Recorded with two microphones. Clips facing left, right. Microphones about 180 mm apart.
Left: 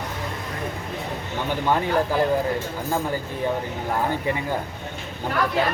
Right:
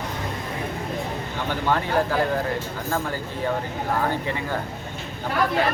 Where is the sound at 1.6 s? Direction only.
15° left (ahead or behind).